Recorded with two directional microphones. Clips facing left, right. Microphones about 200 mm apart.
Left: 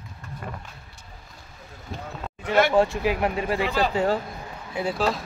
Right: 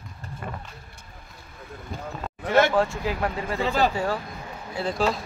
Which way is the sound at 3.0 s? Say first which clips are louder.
Left 3 dB; 20° left (ahead or behind).